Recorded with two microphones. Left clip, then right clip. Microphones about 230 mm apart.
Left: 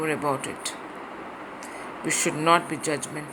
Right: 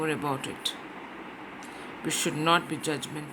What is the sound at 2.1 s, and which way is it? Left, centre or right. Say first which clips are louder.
Speech: left 4 dB; right.